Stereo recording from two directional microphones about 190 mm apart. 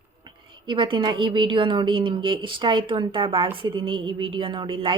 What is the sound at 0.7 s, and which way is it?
A woman's voice, 25° right (ahead or behind).